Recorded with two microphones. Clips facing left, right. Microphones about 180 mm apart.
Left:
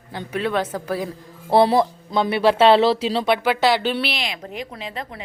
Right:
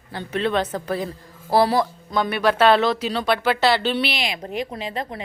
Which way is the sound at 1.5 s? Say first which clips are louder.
Left 2 dB; 25° left (ahead or behind).